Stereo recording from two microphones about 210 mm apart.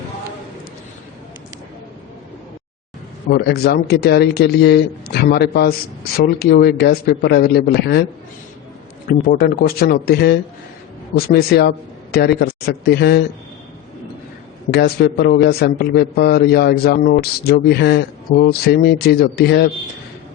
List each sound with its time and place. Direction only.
3.2 s a man's voice: 50° left (ahead or behind)
9.0 s a man's voice: 45° left (ahead or behind)
14.7 s a man's voice: 50° left (ahead or behind)